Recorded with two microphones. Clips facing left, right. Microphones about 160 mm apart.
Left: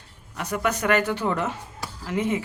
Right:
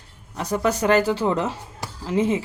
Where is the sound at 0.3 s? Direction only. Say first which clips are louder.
Right 4 dB; 30° right (ahead or behind).